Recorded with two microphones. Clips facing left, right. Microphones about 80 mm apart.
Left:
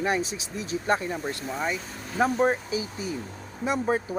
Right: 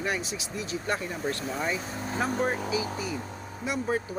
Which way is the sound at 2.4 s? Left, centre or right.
Left.